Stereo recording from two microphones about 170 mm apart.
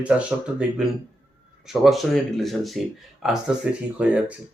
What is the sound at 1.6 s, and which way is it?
Speech, centre (ahead or behind).